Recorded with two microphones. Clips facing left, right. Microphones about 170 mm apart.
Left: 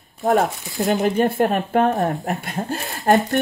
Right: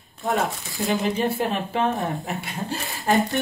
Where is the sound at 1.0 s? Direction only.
50° left (ahead or behind).